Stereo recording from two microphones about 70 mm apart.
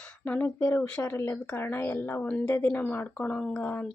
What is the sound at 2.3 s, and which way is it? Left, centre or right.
Speech, centre.